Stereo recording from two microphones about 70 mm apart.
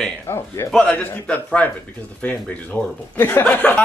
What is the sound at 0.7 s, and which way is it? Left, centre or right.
Speech, centre.